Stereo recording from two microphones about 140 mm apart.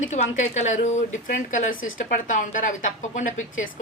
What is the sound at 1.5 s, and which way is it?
A woman's voice, 70° left (ahead or behind).